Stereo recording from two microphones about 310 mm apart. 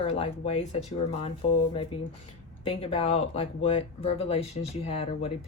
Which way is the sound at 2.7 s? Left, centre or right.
Centre.